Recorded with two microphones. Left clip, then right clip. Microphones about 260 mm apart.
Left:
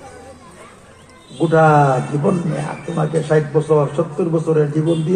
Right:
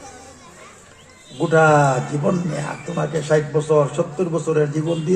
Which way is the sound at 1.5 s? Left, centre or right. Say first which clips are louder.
Left 2 dB; right.